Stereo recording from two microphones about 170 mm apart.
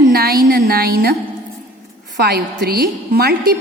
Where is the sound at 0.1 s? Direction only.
65° right (ahead or behind).